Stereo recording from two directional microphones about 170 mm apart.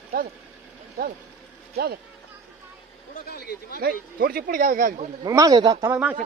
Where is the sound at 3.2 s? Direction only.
65° left (ahead or behind).